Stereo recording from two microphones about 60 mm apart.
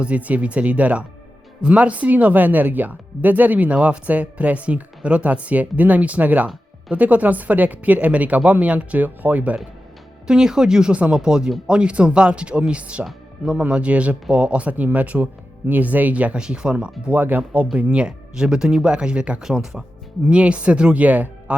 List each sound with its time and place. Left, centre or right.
0.0 s speech: right
10.2 s speech: centre
17.1 s speech: right
19.4 s speech: centre
20.2 s speech: right